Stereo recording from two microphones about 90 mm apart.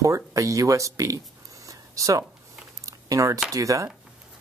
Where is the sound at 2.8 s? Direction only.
40° right (ahead or behind).